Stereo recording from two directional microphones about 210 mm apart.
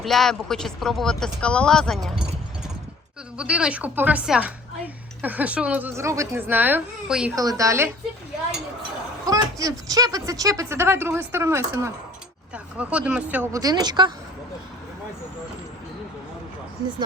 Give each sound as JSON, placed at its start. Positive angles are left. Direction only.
{"t": 0.0, "sound": "speech", "side_deg": 0}
{"t": 3.3, "sound": "speech", "side_deg": -5}
{"t": 9.2, "sound": "speech", "side_deg": -15}